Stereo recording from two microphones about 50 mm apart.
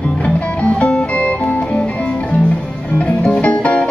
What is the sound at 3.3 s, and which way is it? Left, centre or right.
Music, left.